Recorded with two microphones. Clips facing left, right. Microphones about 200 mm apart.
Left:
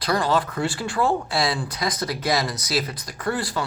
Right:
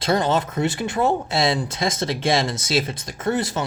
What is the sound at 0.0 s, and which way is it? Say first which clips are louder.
Speech: right 2 dB; 25° right (ahead or behind).